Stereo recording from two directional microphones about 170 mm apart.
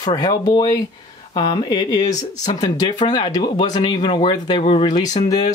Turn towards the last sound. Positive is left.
turn(degrees=20)  # may be behind; listen again after turning